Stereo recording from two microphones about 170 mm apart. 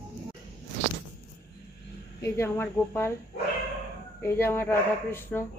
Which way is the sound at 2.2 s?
15° left (ahead or behind).